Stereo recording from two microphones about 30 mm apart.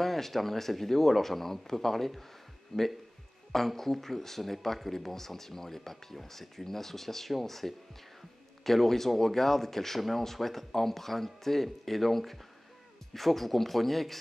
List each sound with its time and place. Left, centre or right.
0.0 s speech: centre
2.7 s speech: centre